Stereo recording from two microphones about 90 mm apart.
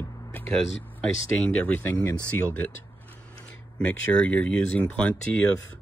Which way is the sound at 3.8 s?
15° left (ahead or behind).